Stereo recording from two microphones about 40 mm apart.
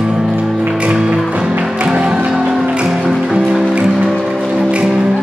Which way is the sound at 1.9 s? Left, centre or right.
Right.